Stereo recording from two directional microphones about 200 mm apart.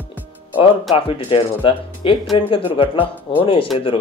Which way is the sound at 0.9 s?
25° left (ahead or behind).